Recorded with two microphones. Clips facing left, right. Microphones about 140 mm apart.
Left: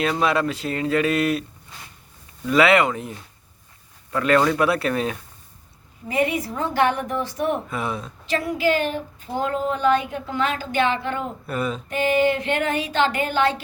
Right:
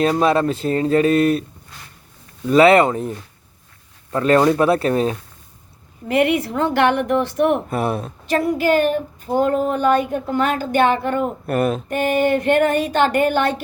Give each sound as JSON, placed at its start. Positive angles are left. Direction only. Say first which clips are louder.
{"t": 0.0, "sound": "speech", "louder": "right 5 dB", "side_deg": -35}
{"t": 2.5, "sound": "speech", "louder": "right 5 dB", "side_deg": -35}
{"t": 4.1, "sound": "speech", "louder": "right 4 dB", "side_deg": -30}
{"t": 6.1, "sound": "a woman's voice", "louder": "right 5 dB", "side_deg": -70}